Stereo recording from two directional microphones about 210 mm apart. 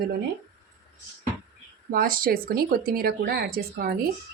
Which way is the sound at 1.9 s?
45° right (ahead or behind).